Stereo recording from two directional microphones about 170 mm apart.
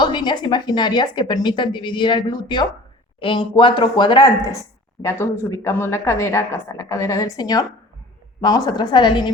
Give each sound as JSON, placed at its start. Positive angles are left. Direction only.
{"t": 0.0, "sound": "a woman's voice", "side_deg": 25}
{"t": 5.0, "sound": "a woman's voice", "side_deg": 15}